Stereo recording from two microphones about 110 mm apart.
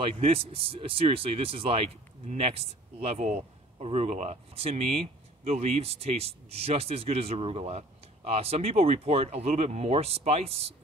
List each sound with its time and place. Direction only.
0.0 s speech: 60° right (ahead or behind)